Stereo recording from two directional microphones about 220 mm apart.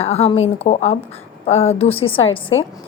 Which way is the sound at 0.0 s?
30° left (ahead or behind).